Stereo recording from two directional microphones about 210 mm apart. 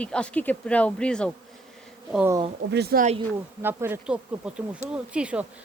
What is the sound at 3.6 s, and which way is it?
Speech, 10° right (ahead or behind).